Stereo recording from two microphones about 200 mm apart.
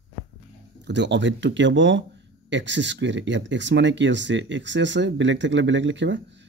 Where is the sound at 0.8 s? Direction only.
60° right (ahead or behind).